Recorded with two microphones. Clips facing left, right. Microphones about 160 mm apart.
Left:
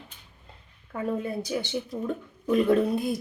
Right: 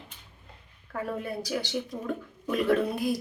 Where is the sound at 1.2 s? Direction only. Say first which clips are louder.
Left 2 dB; 20° left (ahead or behind).